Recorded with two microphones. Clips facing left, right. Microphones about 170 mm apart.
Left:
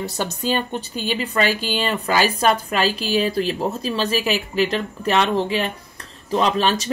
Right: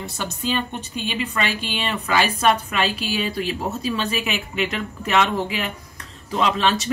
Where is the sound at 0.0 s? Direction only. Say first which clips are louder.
Left 3 dB; 40° left (ahead or behind).